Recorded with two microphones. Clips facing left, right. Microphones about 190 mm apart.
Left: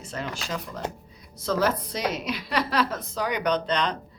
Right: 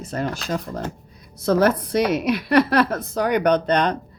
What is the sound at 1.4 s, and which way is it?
A woman's voice, 60° right (ahead or behind).